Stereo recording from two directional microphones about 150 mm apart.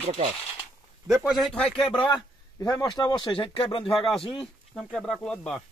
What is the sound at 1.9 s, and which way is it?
Speech, 35° left (ahead or behind).